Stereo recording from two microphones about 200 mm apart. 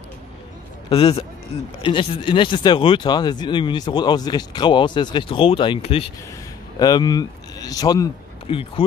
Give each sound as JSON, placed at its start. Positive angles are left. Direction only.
{"t": 0.8, "sound": "speech", "side_deg": 30}